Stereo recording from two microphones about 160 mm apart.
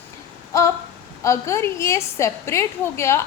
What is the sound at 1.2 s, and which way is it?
A woman's voice, 20° left (ahead or behind).